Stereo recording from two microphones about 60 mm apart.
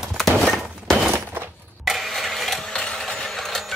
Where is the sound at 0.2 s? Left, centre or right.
Centre.